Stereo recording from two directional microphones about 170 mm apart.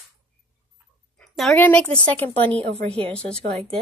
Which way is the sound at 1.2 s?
Centre (ahead or behind).